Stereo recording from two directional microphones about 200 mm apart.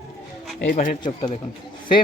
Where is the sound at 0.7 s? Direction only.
45° left (ahead or behind).